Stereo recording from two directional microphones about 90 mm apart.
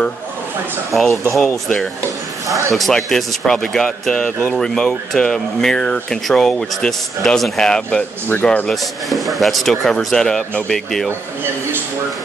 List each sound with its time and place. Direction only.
0.9 s speech: centre (ahead or behind)
2.4 s speech: 35° right (ahead or behind)
2.7 s speech: centre (ahead or behind); by 8.6 s 15° left (ahead or behind)
8.6 s speech: centre (ahead or behind)